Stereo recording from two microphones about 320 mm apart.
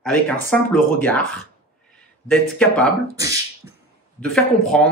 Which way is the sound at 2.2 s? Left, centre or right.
Centre.